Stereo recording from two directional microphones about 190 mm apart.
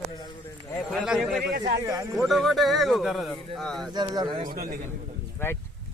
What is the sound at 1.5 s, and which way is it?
Speech, 55° right (ahead or behind).